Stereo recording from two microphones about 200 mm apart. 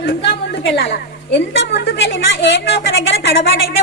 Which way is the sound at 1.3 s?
60° left (ahead or behind).